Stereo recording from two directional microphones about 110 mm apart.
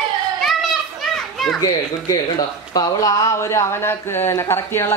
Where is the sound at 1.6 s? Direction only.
35° left (ahead or behind).